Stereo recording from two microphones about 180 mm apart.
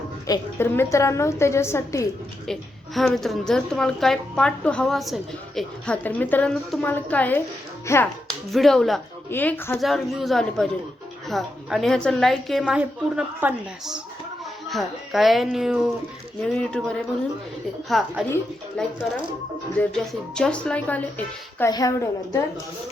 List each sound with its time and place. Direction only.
0.3 s a woman's voice: 15° left (ahead or behind)
2.5 s a woman's voice: centre (ahead or behind)
8.5 s a woman's voice: centre (ahead or behind)
9.7 s a woman's voice: centre (ahead or behind)
19.9 s a woman's voice: 5° left (ahead or behind)
21.7 s a woman's voice: 20° left (ahead or behind)